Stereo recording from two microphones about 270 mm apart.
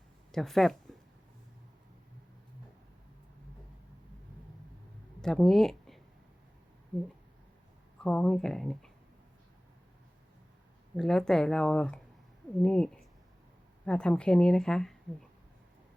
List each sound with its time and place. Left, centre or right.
0.3 s speech: centre
5.2 s speech: centre
8.0 s a woman's voice: centre
10.9 s a woman's voice: centre